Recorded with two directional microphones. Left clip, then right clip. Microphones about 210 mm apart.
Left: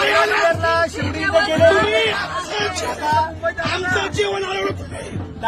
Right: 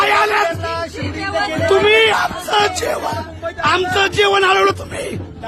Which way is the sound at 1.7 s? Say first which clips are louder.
Right 3 dB; 40° right (ahead or behind).